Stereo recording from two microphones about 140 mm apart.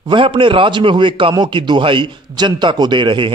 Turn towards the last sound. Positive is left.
turn(degrees=-35)  # may be behind; listen again after turning